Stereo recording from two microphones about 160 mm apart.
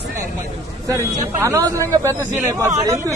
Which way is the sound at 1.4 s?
20° right (ahead or behind).